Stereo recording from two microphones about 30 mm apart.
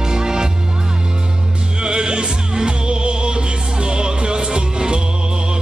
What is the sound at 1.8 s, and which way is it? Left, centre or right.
Music, right.